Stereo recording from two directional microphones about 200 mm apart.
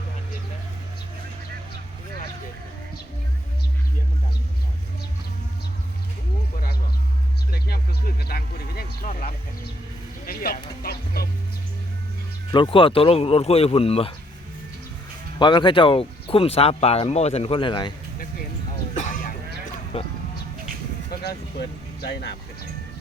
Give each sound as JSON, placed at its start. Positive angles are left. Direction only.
{"t": 7.5, "sound": "a sound", "side_deg": 50}
{"t": 10.8, "sound": "music", "side_deg": 50}
{"t": 12.5, "sound": "speech", "side_deg": 25}
{"t": 15.4, "sound": "speech", "side_deg": 25}
{"t": 18.9, "sound": "sheep", "side_deg": 40}
{"t": 19.9, "sound": "speech", "side_deg": 25}
{"t": 22.0, "sound": "speech", "side_deg": 55}